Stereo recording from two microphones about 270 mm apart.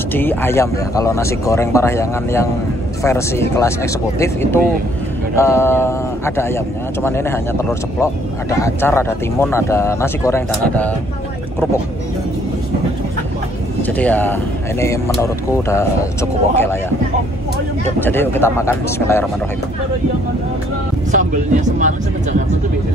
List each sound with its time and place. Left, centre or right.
0.1 s speech: centre
13.8 s speech: centre
18.0 s speech: centre
21.7 s speech: right